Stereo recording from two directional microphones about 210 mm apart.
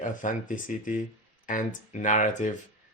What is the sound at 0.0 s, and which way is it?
Speech, 40° left (ahead or behind).